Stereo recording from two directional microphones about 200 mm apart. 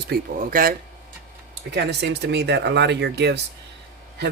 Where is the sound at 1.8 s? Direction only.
60° right (ahead or behind).